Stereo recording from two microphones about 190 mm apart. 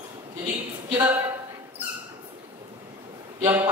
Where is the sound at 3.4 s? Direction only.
15° right (ahead or behind).